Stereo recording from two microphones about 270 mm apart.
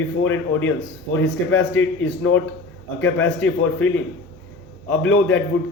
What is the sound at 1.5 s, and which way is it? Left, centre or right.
Speech, left.